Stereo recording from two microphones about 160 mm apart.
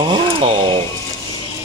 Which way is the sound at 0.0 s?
35° right (ahead or behind).